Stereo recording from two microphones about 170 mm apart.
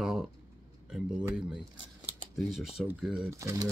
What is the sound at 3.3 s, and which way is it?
Speech, 20° right (ahead or behind).